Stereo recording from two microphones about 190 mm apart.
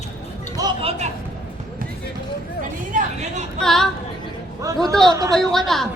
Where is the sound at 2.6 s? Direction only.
40° right (ahead or behind).